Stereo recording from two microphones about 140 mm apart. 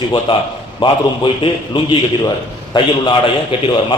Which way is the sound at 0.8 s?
35° left (ahead or behind).